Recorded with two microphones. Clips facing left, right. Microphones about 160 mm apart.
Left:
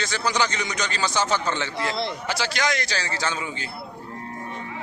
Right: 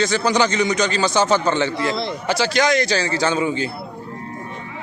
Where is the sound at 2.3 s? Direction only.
25° right (ahead or behind).